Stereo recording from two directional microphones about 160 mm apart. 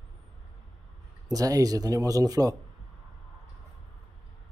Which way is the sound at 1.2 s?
20° right (ahead or behind).